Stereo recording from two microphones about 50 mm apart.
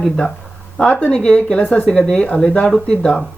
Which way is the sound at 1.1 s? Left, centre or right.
Centre.